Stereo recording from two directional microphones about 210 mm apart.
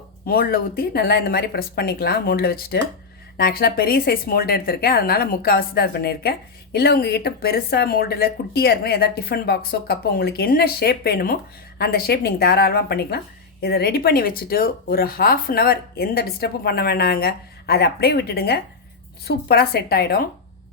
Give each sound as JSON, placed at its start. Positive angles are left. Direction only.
{"t": 0.3, "sound": "speech", "side_deg": 45}